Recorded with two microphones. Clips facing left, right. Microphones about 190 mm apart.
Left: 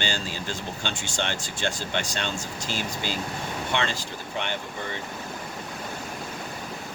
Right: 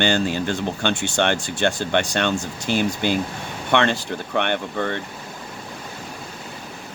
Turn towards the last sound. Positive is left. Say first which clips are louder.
# right 9 dB
turn(degrees=-65)  # may be behind; listen again after turning